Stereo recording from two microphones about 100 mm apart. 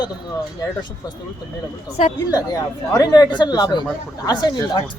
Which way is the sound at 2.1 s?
35° left (ahead or behind).